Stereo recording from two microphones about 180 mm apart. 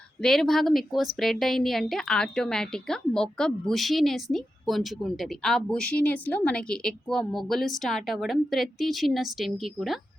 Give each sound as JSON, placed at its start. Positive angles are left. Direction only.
{"t": 0.2, "sound": "a woman's voice", "side_deg": 0}